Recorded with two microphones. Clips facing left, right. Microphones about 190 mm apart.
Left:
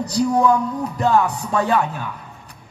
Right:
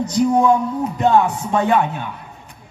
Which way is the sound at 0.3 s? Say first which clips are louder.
Right 1 dB; 20° right (ahead or behind).